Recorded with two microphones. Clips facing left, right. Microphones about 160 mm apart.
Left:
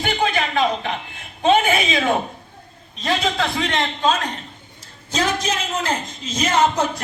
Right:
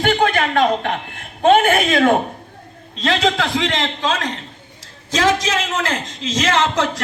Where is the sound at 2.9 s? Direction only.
80° right.